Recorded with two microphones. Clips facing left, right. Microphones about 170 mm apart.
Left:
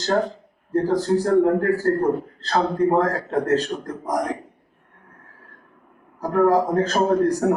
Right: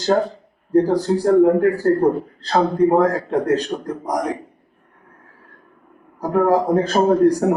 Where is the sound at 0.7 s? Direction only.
15° right (ahead or behind).